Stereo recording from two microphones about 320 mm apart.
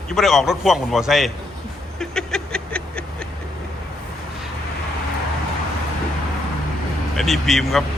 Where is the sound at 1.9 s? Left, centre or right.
Centre.